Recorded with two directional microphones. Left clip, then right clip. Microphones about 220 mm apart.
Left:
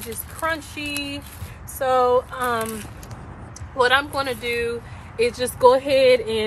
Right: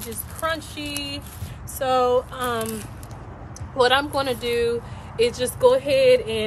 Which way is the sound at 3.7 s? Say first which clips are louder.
Even; 10° right (ahead or behind).